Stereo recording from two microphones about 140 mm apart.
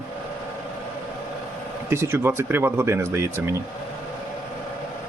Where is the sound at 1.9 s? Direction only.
20° right (ahead or behind).